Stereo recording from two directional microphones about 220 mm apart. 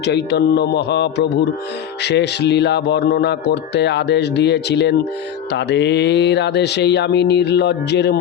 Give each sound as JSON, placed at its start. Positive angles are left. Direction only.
{"t": 0.0, "sound": "speech", "side_deg": 50}